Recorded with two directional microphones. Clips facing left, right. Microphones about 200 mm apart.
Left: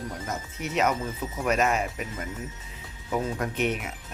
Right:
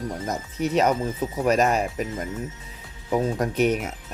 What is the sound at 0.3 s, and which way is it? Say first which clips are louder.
Speech: right 7 dB; 35° right (ahead or behind).